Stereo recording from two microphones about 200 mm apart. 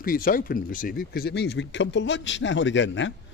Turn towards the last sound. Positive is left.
turn(degrees=65)  # may be behind; listen again after turning